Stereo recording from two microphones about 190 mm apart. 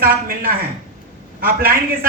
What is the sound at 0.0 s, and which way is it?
A man's voice, 50° right (ahead or behind).